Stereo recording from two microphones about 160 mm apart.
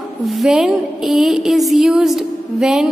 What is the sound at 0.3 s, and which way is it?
A woman's voice, centre (ahead or behind).